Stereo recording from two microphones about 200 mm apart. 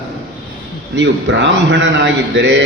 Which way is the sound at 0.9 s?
65° right (ahead or behind).